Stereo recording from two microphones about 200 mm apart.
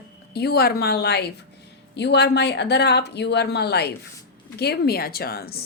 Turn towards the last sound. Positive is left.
turn(degrees=50)  # may be behind; listen again after turning